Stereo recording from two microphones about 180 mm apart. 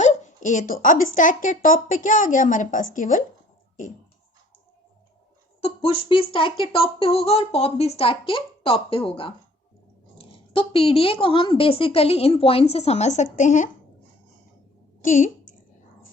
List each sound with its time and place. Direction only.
0.0 s speech: 40° left (ahead or behind)
5.5 s speech: 30° left (ahead or behind)
15.0 s a sound: 45° left (ahead or behind)